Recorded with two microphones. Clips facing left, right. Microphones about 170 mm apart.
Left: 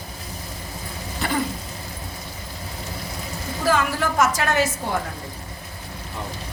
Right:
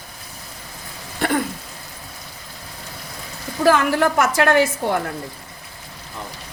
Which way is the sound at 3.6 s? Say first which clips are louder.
Right 6 dB; 60° right (ahead or behind).